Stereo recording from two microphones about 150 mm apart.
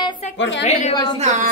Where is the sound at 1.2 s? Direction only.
50° right (ahead or behind).